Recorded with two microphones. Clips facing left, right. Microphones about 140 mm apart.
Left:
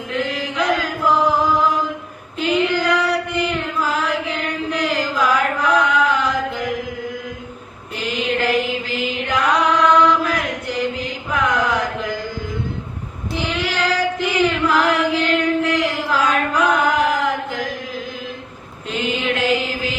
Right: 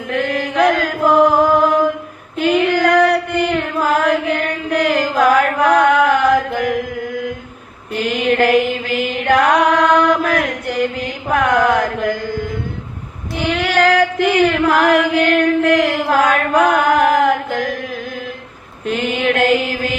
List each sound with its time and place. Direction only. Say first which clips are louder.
0.1 s chant: right 5 dB; 55° right (ahead or behind)
2.4 s female singing: right 4 dB; 55° right (ahead or behind)
7.9 s mantra: right 6 dB; 60° right (ahead or behind)
13.5 s a sound: right 9 dB; 55° right (ahead or behind)
18.9 s mantra: right 5 dB; 60° right (ahead or behind)